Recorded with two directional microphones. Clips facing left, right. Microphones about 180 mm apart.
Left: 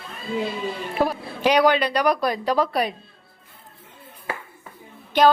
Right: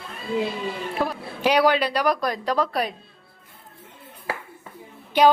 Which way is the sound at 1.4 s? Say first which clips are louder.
Left 1 dB; 5° right (ahead or behind).